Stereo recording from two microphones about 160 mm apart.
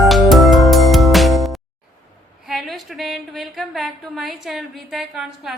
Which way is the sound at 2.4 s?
Centre (ahead or behind).